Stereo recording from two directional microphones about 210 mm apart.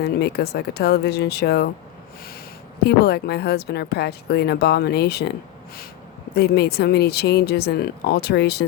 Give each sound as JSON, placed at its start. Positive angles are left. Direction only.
{"t": 0.0, "sound": "a woman's voice", "side_deg": 50}
{"t": 2.8, "sound": "a woman's voice", "side_deg": 50}
{"t": 6.3, "sound": "a woman's voice", "side_deg": 50}